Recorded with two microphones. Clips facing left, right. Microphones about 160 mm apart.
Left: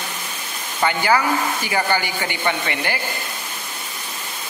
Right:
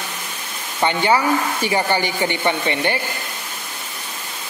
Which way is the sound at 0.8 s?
25° right (ahead or behind).